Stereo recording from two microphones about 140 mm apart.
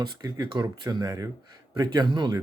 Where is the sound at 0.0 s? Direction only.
25° right (ahead or behind).